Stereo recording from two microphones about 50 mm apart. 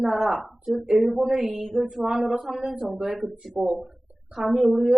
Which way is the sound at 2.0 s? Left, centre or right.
Centre.